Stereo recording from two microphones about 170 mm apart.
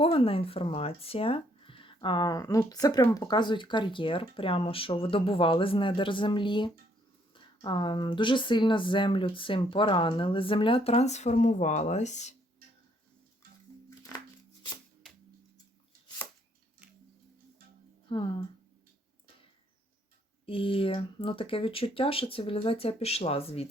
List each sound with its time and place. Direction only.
0.0 s speech: 35° left (ahead or behind)
18.1 s speech: 30° left (ahead or behind)
20.4 s speech: 30° left (ahead or behind)